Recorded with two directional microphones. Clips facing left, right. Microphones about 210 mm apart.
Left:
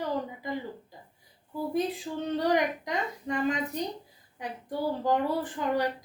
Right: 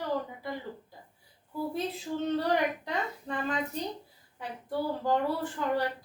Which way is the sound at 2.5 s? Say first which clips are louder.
Left 2 dB; 15° left (ahead or behind).